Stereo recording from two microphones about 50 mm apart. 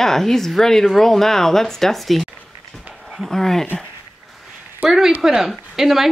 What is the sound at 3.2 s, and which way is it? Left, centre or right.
Speech, centre.